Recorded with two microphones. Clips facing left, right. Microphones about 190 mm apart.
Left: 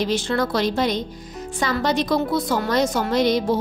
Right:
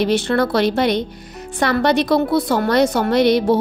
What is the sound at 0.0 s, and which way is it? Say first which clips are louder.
A woman's voice: right 5 dB; 65° right (ahead or behind).